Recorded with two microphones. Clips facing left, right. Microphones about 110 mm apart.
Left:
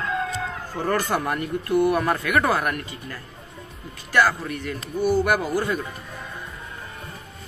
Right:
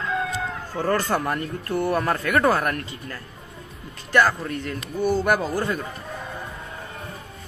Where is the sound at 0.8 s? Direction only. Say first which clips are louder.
Right 1 dB; 15° left (ahead or behind).